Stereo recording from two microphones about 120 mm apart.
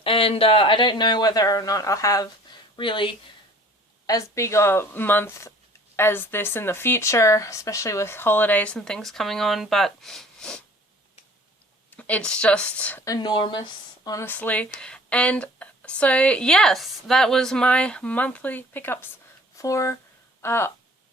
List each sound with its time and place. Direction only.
0.0 s speech: 50° left (ahead or behind); by 2.3 s 30° left (ahead or behind)
2.7 s speech: 45° left (ahead or behind)
4.0 s speech: 25° left (ahead or behind); by 10.6 s 5° left (ahead or behind)
11.9 s a woman's voice: 10° left (ahead or behind)
13.1 s a woman's voice: 40° left (ahead or behind)
14.3 s speech: 15° left (ahead or behind)